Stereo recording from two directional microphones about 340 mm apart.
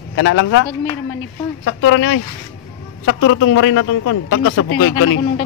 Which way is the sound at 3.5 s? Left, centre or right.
Left.